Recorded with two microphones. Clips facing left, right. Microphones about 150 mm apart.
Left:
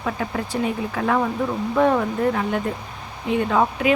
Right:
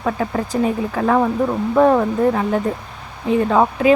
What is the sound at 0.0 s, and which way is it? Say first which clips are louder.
Speech: right 5 dB; 40° right (ahead or behind).